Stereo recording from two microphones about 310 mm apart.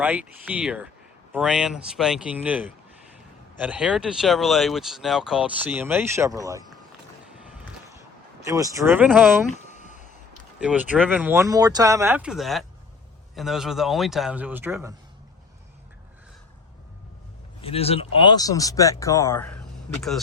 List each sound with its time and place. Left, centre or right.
0.0 s speech: centre
8.4 s speech: centre
9.6 s a sound: left
10.6 s speech: centre
17.6 s speech: centre